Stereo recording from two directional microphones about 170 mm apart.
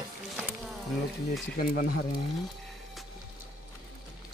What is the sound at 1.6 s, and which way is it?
Speech, 60° left (ahead or behind).